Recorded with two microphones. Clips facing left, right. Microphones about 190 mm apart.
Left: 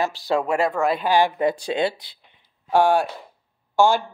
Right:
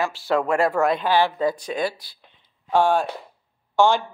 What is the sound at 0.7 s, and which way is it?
Speech, centre (ahead or behind).